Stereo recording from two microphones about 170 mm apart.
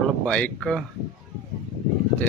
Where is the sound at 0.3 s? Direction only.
5° left (ahead or behind).